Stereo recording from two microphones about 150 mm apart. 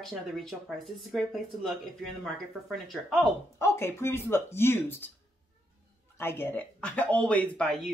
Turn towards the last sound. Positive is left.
turn(degrees=5)  # may be behind; listen again after turning